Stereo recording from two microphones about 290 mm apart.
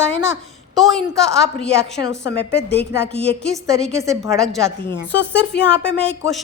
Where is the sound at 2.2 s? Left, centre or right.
Left.